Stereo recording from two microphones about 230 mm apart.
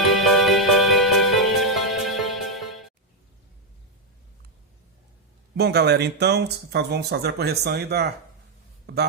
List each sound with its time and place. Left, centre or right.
0.2 s music: centre
5.5 s speech: right